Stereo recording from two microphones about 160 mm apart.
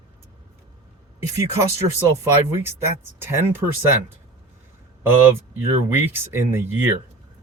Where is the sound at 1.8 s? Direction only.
15° right (ahead or behind).